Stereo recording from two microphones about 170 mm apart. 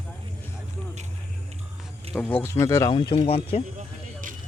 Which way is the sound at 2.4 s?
15° left (ahead or behind).